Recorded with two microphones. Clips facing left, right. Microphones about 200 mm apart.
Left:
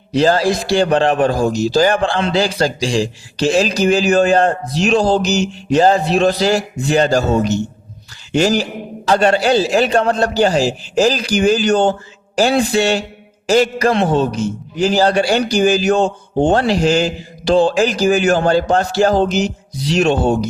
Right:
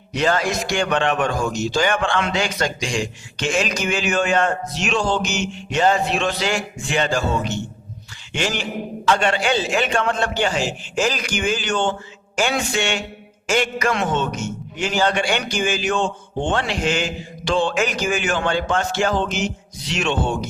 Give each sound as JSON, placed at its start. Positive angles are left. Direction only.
{"t": 0.1, "sound": "a man's voice", "side_deg": 30}